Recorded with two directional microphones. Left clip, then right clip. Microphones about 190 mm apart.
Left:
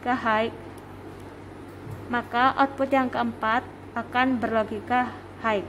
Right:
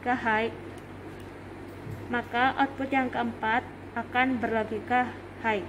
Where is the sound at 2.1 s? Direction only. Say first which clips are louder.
Left 4 dB; 50° left (ahead or behind).